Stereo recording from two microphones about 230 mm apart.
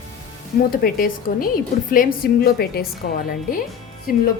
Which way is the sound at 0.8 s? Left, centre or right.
Left.